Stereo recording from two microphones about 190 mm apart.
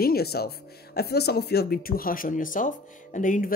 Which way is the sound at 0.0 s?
55° left (ahead or behind).